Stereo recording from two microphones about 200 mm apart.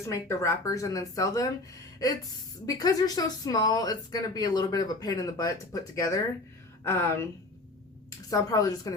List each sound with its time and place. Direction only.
0.0 s speech: 15° left (ahead or behind)
2.6 s speech: 20° left (ahead or behind)
8.3 s speech: 15° left (ahead or behind)